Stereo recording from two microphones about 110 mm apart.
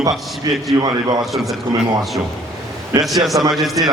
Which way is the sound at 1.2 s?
Centre (ahead or behind).